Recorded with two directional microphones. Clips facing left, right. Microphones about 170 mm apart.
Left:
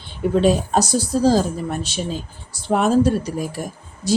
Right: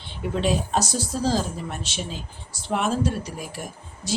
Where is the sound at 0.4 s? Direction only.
40° left (ahead or behind).